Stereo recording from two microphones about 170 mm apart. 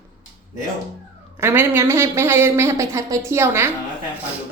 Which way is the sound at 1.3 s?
15° right (ahead or behind).